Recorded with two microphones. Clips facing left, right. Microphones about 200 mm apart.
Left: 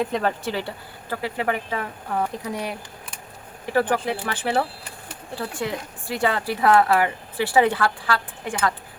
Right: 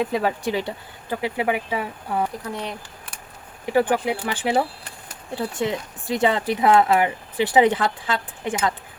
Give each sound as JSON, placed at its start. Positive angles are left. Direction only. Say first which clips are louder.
{"t": 0.0, "sound": "speech", "louder": "right 1 dB", "side_deg": -5}
{"t": 2.4, "sound": "speech", "louder": "left 1 dB", "side_deg": 10}
{"t": 3.7, "sound": "speech", "louder": "right 2 dB", "side_deg": -15}